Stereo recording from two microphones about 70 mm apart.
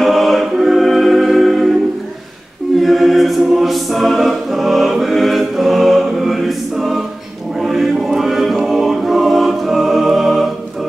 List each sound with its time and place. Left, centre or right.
0.0 s choir: centre
2.8 s choir: centre